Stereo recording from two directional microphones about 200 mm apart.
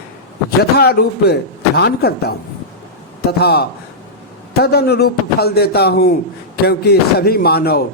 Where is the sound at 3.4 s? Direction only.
55° left (ahead or behind).